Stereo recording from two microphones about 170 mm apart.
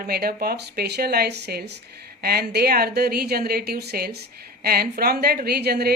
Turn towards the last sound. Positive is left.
turn(degrees=-65)  # may be behind; listen again after turning